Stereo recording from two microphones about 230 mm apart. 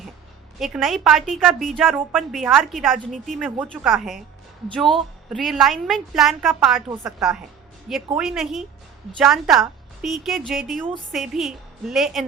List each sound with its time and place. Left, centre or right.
0.6 s a woman's voice: centre